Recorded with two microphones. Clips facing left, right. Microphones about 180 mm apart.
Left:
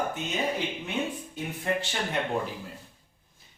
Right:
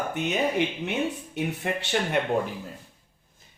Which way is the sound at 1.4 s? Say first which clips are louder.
Right 1 dB; 70° right (ahead or behind).